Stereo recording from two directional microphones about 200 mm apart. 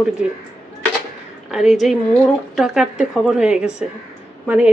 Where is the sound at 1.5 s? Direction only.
Centre (ahead or behind).